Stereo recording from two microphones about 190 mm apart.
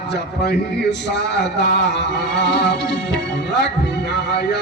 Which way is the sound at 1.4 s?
65° left (ahead or behind).